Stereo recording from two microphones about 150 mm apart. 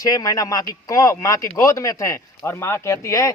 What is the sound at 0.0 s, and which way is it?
Speech, 25° left (ahead or behind).